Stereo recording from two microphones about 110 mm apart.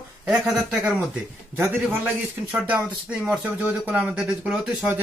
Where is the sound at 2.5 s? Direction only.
10° right (ahead or behind).